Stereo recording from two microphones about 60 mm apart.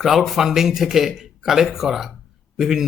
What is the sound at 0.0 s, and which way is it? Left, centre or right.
Speech, centre.